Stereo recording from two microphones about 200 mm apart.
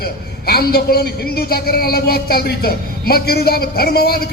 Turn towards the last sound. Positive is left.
turn(degrees=50)  # may be behind; listen again after turning